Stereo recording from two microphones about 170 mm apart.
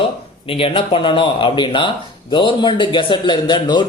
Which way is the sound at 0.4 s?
30° left (ahead or behind).